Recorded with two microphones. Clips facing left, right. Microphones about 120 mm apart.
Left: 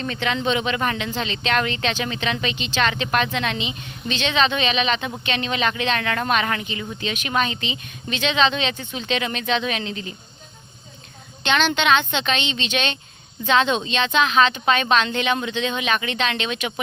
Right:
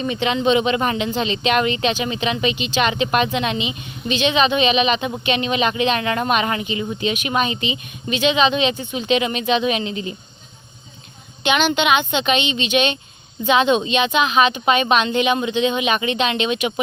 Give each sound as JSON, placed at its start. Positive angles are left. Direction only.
{"t": 0.0, "sound": "speech", "side_deg": -15}
{"t": 11.4, "sound": "speech", "side_deg": -10}